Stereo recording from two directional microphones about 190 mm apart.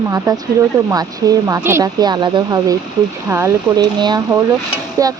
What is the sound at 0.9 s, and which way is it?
Speech, 20° right (ahead or behind).